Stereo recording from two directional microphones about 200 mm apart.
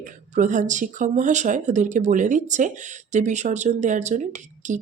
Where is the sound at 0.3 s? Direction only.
40° right (ahead or behind).